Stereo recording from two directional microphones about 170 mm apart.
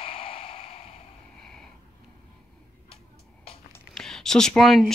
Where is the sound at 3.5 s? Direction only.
Centre (ahead or behind).